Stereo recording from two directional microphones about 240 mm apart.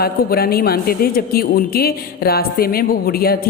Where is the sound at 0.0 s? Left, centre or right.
Left.